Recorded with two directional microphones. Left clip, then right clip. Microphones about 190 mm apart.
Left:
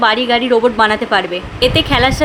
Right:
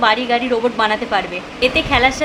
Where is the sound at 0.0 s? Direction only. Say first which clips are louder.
Left 3 dB; 25° left (ahead or behind).